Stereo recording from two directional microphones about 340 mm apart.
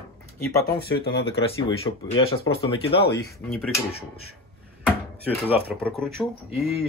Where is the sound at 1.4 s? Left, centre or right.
Centre.